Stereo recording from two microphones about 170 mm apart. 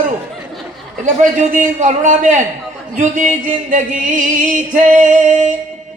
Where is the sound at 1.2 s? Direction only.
50° right (ahead or behind).